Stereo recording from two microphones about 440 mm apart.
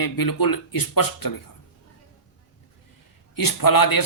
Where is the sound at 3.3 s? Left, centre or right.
Left.